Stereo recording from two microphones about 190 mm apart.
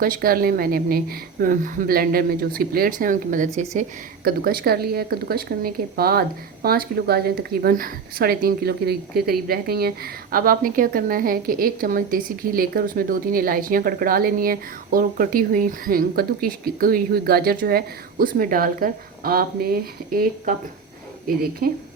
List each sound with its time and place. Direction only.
0.0 s a woman's voice: 50° right (ahead or behind)
3.8 s a woman's voice: 50° right (ahead or behind)